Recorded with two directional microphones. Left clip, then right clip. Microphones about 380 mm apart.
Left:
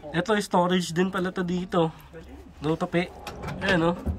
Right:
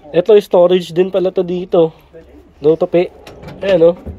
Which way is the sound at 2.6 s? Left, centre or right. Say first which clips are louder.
Right 16 dB; centre.